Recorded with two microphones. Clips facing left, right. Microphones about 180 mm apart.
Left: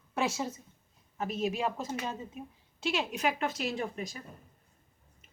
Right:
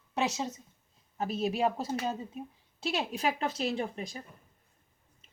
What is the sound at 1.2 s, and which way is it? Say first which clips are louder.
A woman's voice: right 2 dB; 35° right (ahead or behind).